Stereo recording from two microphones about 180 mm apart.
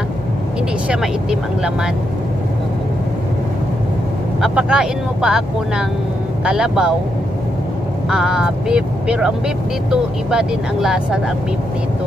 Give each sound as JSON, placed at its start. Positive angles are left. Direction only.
{"t": 0.8, "sound": "speech", "side_deg": -5}
{"t": 4.4, "sound": "speech", "side_deg": -5}
{"t": 8.1, "sound": "speech", "side_deg": -5}